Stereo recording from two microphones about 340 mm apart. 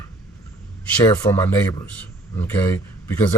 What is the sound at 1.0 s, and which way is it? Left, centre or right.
Speech, centre.